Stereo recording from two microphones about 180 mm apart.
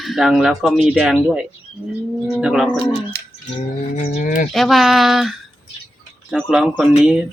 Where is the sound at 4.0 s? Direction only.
40° left (ahead or behind).